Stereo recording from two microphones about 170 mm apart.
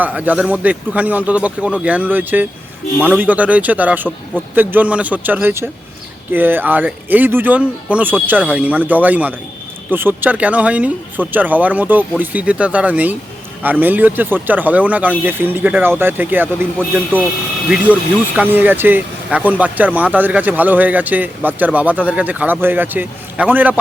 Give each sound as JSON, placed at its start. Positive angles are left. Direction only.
{"t": 0.0, "sound": "speech", "side_deg": -10}
{"t": 18.3, "sound": "speech", "side_deg": -10}